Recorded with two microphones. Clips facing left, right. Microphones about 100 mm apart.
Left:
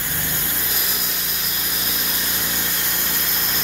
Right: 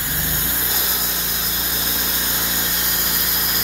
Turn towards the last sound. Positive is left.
turn(degrees=-15)  # may be behind; listen again after turning